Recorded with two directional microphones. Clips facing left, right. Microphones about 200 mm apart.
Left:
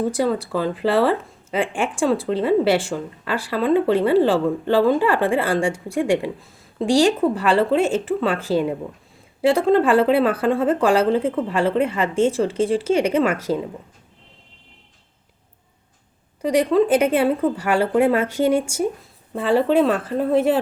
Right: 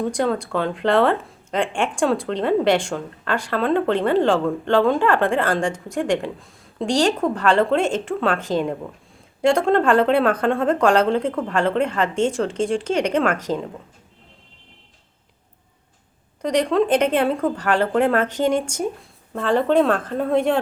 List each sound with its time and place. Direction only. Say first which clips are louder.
0.0 s speech: left 1 dB; 5° left (ahead or behind)
16.4 s speech: left 2 dB; 5° left (ahead or behind)